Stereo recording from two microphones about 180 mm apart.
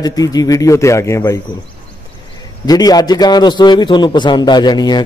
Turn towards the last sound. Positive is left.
turn(degrees=25)  # may be behind; listen again after turning